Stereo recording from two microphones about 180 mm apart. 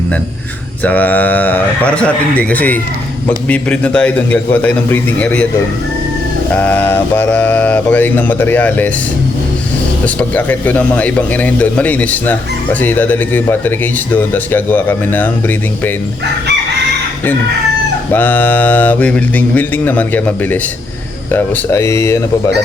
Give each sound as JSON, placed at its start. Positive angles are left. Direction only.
{"t": 0.9, "sound": "speech", "side_deg": 10}
{"t": 6.5, "sound": "speech", "side_deg": 10}
{"t": 10.2, "sound": "speech", "side_deg": 10}
{"t": 18.1, "sound": "speech", "side_deg": 10}